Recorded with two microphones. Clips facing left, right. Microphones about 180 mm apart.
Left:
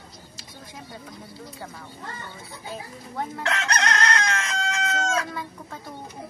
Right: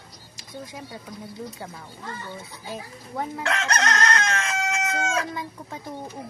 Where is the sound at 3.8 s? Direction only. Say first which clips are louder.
Even; 25° right (ahead or behind).